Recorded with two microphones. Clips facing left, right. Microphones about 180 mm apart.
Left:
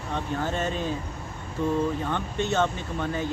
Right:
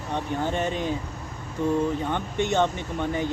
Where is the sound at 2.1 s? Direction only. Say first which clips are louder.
Right 2 dB; 15° right (ahead or behind).